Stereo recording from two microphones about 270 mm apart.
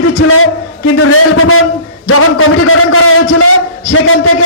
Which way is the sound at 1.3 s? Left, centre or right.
Left.